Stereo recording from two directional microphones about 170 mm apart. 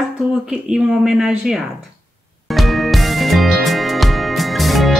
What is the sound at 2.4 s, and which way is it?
Music, centre (ahead or behind).